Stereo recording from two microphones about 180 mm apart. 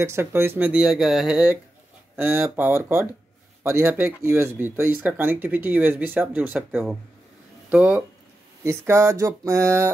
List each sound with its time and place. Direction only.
0.0 s speech: 15° right (ahead or behind)